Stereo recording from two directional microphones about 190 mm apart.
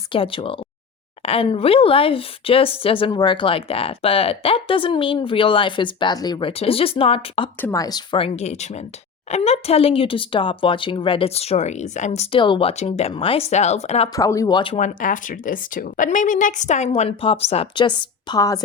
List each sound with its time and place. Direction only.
0.1 s speech: 30° left (ahead or behind)
7.6 s speech: 15° left (ahead or behind); by 14.1 s 35° left (ahead or behind)
14.1 s speech: 15° left (ahead or behind)
14.8 s speech: 40° left (ahead or behind); by 18.6 s 20° left (ahead or behind)